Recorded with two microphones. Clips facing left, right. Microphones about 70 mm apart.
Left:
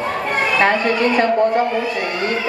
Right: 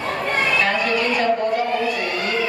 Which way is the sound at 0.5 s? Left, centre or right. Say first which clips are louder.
Left 4 dB; left.